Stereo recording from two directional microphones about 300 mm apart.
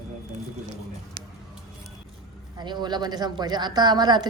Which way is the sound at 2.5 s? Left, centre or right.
Centre.